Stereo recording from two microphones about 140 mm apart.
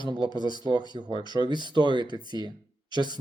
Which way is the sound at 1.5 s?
30° right (ahead or behind).